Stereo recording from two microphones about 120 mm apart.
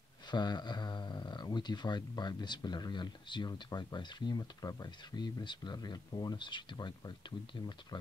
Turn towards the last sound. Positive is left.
turn(degrees=40)  # may be behind; listen again after turning